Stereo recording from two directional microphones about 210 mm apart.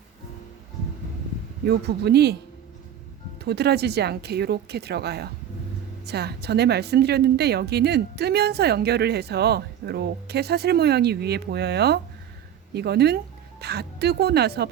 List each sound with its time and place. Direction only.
1.6 s a woman's voice: 50° right (ahead or behind)
3.4 s a woman's voice: 50° right (ahead or behind)